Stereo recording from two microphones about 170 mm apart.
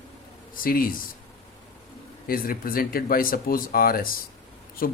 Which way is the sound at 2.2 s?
55° left (ahead or behind).